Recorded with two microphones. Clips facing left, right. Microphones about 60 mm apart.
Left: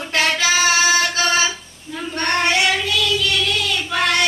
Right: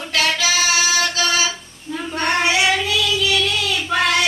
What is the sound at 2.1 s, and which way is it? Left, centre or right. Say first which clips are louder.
Child singing: even; centre.